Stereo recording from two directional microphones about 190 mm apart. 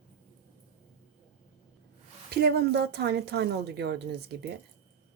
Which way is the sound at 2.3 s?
60° right (ahead or behind).